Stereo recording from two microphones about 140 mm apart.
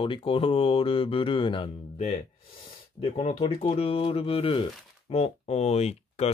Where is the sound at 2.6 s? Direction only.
40° left (ahead or behind).